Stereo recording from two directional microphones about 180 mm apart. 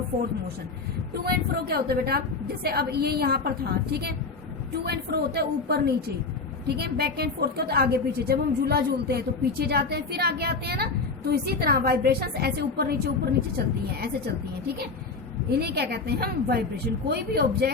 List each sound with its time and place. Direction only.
1.2 s a woman's voice: 60° right (ahead or behind)
15.4 s a woman's voice: 60° right (ahead or behind)